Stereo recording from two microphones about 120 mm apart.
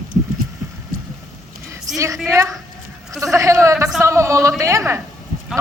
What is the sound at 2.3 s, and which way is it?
A man's voice, 25° right (ahead or behind).